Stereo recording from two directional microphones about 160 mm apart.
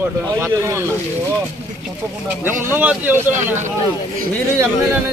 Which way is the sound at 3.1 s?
50° right (ahead or behind).